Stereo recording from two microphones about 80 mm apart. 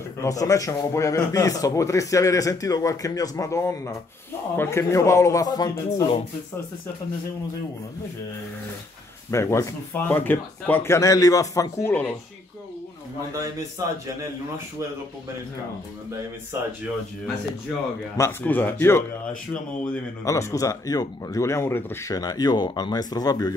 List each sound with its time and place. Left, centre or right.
0.2 s a man's voice: left
9.3 s speech: left
10.0 s speech: left
11.8 s speech: centre
13.3 s a man's voice: right
16.5 s speech: right
18.4 s speech: left
19.5 s speech: centre
20.2 s speech: left
22.1 s speech: left